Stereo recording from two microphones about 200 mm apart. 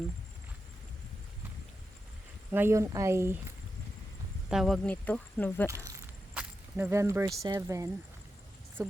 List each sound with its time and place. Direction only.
2.5 s speech: 10° right (ahead or behind)
4.4 s speech: centre (ahead or behind)
5.6 s a sound: 15° right (ahead or behind)
7.4 s speech: 15° right (ahead or behind)